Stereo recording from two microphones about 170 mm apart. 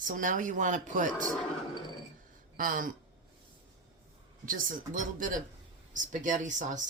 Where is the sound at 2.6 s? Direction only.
55° right (ahead or behind).